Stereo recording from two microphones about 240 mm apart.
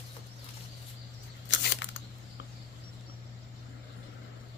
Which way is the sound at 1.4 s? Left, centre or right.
Left.